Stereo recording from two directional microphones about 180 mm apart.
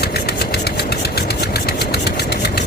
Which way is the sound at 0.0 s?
60° left (ahead or behind).